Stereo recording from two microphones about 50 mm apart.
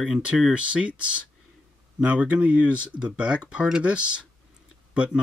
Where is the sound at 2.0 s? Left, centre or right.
Right.